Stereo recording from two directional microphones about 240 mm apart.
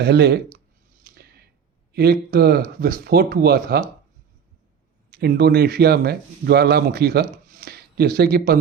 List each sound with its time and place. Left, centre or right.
0.0 s speech: right
1.0 s a sound: right
1.9 s speech: right
5.1 s speech: right